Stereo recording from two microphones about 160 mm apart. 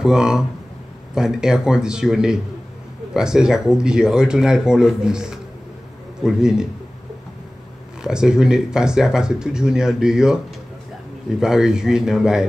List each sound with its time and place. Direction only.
0.0 s speech: 5° right (ahead or behind)
8.0 s speech: 5° right (ahead or behind)